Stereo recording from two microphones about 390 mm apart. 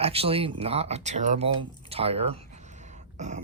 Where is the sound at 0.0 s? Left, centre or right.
Centre.